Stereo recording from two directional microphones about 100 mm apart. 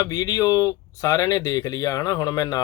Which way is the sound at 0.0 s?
35° left (ahead or behind).